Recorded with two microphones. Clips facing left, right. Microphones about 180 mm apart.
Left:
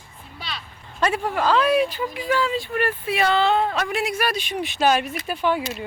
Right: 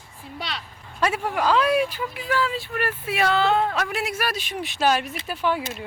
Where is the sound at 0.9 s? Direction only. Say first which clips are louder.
Left 1 dB; 5° right (ahead or behind).